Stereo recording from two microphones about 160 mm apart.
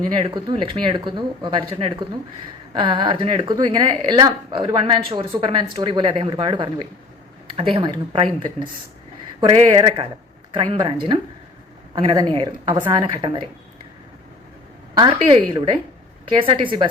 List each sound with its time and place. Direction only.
0.2 s speech: 25° right (ahead or behind)
11.9 s speech: 25° right (ahead or behind)
14.9 s speech: 30° right (ahead or behind)
16.6 s speech: 30° right (ahead or behind)